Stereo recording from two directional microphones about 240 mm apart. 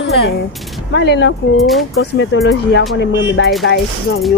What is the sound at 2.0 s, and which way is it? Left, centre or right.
Speech, left.